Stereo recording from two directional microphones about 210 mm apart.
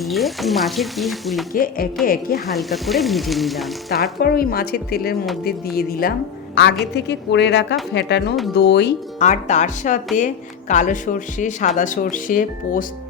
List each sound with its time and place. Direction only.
0.0 s frying: centre (ahead or behind)
1.5 s a woman's voice: 45° left (ahead or behind)
2.5 s frying: centre (ahead or behind)
4.2 s a woman's voice: 45° left (ahead or behind)
9.1 s speech: 35° left (ahead or behind)